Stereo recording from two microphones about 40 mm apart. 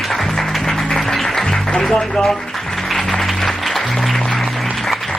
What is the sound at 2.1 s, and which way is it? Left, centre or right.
Speech, centre.